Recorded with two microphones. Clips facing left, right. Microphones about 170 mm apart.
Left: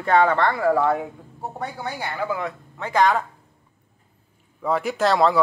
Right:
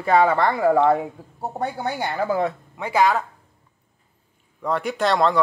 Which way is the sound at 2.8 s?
5° right (ahead or behind).